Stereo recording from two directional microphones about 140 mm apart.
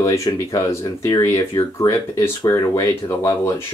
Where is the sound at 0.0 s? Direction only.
20° left (ahead or behind).